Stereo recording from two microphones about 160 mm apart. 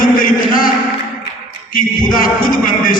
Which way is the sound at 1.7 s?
60° left (ahead or behind).